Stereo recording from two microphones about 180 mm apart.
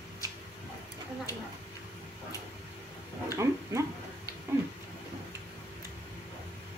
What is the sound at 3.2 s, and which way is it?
Dog, 15° right (ahead or behind).